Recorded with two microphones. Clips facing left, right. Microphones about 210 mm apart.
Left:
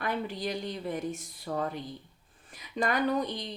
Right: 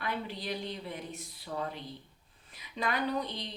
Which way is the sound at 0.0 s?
45° left (ahead or behind).